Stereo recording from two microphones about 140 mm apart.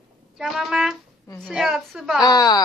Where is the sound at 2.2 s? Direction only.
25° left (ahead or behind).